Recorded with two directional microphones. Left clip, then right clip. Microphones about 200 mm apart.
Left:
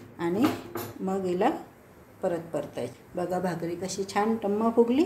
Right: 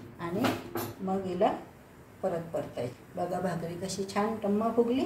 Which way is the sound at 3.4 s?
45° left (ahead or behind).